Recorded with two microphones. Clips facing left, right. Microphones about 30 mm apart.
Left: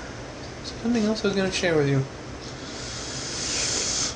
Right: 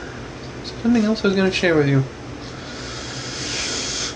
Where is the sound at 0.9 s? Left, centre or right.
Right.